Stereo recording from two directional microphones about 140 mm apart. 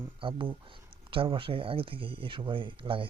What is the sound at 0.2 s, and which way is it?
Speech, 40° right (ahead or behind).